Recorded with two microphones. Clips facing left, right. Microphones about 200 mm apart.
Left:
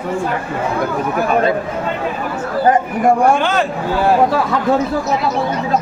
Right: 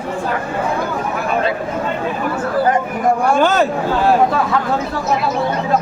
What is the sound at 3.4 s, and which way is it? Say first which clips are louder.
Speech: right 3 dB; 40° right (ahead or behind).